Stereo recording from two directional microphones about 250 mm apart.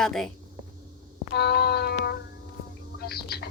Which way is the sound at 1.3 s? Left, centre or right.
Left.